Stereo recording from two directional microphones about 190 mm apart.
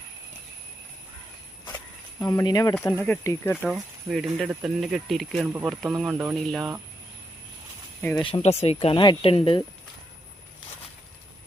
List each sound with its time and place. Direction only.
2.1 s speech: 15° left (ahead or behind)
2.7 s speech: 10° left (ahead or behind)
3.6 s speech: centre (ahead or behind)
8.2 s speech: 30° left (ahead or behind)